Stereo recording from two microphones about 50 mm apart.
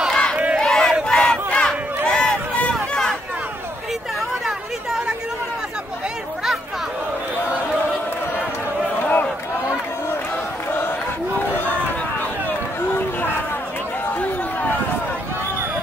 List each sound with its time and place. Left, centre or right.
0.1 s crowd: centre
0.6 s battle cry: centre
2.6 s a sound: centre
4.5 s chatter: centre
10.7 s battle cry: left